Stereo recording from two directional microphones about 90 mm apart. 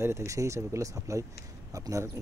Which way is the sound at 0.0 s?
30° right (ahead or behind).